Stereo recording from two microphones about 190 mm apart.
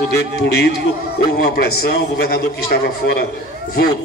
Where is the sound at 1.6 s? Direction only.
60° left (ahead or behind).